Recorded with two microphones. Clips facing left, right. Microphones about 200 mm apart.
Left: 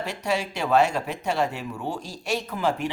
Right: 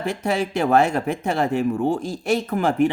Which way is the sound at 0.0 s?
50° right (ahead or behind).